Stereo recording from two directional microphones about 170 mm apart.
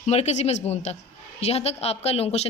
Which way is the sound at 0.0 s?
40° left (ahead or behind).